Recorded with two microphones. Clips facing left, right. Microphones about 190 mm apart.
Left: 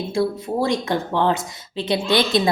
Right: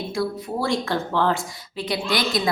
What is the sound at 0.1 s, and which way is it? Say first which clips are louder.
Speech: left 6 dB; 25° left (ahead or behind).